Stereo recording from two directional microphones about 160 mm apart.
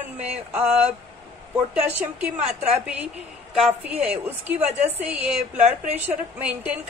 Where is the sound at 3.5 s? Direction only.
10° right (ahead or behind).